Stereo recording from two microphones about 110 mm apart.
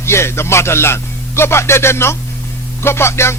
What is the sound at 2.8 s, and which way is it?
Music, 20° left (ahead or behind).